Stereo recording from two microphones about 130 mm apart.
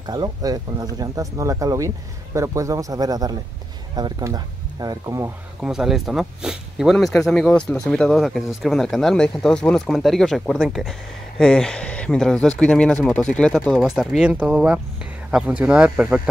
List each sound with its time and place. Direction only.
0.0 s speech: 30° right (ahead or behind)
5.6 s speech: 5° right (ahead or behind)